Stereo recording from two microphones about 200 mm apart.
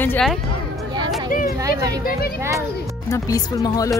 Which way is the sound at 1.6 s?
15° right (ahead or behind).